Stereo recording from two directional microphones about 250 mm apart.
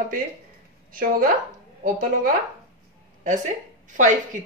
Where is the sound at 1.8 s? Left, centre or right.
Right.